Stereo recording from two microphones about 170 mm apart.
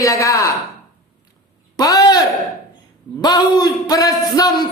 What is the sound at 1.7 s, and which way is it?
A man's voice, 20° left (ahead or behind).